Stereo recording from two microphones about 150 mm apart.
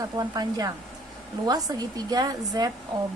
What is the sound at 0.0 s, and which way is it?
Speech, 25° right (ahead or behind).